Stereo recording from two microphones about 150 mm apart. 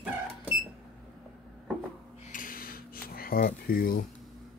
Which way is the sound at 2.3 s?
70° left (ahead or behind).